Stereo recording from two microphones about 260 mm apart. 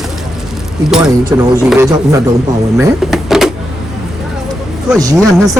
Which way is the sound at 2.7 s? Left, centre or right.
Centre.